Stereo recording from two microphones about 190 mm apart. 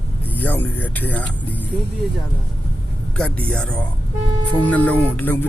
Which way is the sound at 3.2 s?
5° left (ahead or behind).